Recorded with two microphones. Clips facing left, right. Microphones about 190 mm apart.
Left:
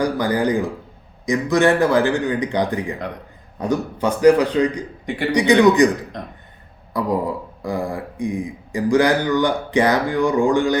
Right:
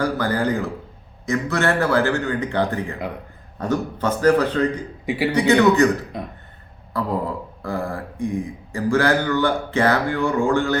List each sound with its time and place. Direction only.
0.0 s speech: 15° left (ahead or behind)
5.0 s a man's voice: 5° right (ahead or behind)
5.3 s speech: 15° left (ahead or behind)
6.1 s speech: 5° right (ahead or behind)
6.9 s speech: 15° left (ahead or behind)